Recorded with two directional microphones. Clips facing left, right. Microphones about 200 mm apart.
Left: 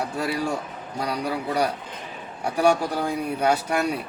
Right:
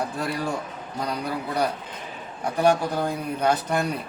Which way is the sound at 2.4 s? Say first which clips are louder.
Even; 10° left (ahead or behind).